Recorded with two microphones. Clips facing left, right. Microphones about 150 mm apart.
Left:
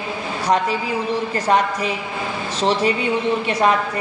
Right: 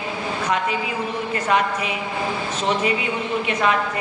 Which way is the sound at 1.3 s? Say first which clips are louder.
Left 1 dB; 35° left (ahead or behind).